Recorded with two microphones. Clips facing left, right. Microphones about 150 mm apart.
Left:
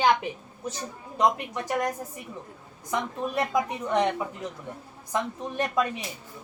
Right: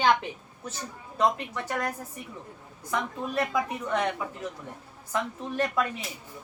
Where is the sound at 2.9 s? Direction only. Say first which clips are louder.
Left 1 dB; 20° left (ahead or behind).